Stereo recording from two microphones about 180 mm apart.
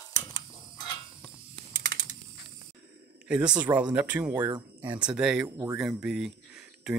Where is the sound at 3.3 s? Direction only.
5° right (ahead or behind).